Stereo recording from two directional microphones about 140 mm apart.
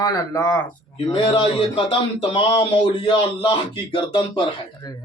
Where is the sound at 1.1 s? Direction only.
40° left (ahead or behind).